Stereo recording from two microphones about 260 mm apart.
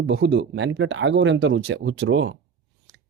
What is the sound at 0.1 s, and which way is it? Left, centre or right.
Speech, right.